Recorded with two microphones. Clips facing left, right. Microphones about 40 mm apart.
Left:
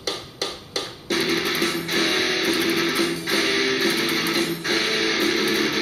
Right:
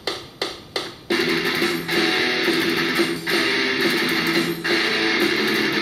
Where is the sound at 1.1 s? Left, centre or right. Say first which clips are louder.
Right 2 dB; centre.